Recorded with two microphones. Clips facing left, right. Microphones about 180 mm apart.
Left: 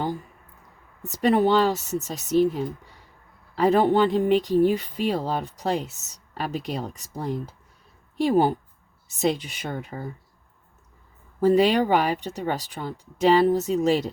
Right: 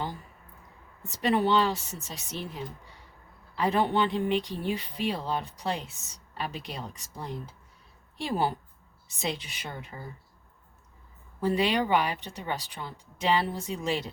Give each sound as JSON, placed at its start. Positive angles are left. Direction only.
{"t": 1.2, "sound": "speech", "side_deg": 45}
{"t": 8.2, "sound": "speech", "side_deg": 50}
{"t": 11.3, "sound": "speech", "side_deg": 45}